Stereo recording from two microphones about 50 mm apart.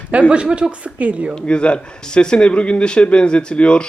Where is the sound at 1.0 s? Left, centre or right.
Right.